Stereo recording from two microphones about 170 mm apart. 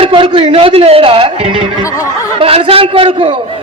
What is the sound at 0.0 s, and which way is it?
A man's voice, 30° right (ahead or behind).